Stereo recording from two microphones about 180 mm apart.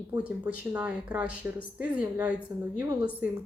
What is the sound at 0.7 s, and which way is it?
Speech, 5° right (ahead or behind).